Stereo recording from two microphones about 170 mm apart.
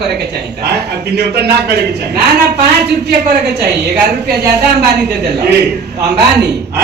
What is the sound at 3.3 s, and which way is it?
A man's voice, 80° right.